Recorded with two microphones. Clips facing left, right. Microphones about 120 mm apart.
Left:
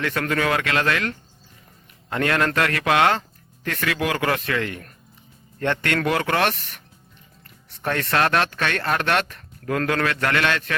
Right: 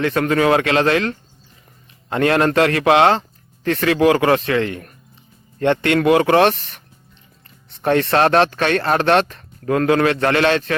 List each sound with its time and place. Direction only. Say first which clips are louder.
0.0 s a man's voice: right 7 dB; 25° right (ahead or behind)